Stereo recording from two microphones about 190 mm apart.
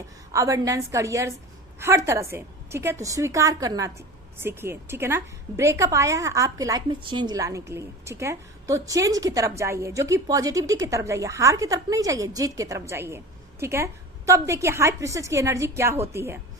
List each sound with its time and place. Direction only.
0.3 s a woman's voice: 15° right (ahead or behind)